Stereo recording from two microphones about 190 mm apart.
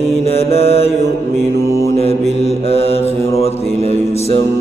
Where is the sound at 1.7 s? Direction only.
15° left (ahead or behind).